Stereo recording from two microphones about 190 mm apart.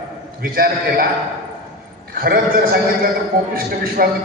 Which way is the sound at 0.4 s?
50° right (ahead or behind).